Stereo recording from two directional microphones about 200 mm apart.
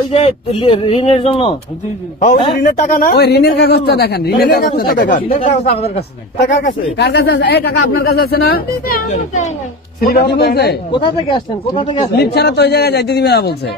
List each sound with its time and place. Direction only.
0.1 s a man's voice: 30° left (ahead or behind); by 5.2 s 50° left (ahead or behind)
5.4 s speech: 35° left (ahead or behind)
7.0 s a man's voice: 60° left (ahead or behind); by 9.5 s 35° left (ahead or behind)
10.0 s a man's voice: 55° left (ahead or behind)
10.9 s speech: 25° left (ahead or behind)
12.2 s a man's voice: 55° left (ahead or behind)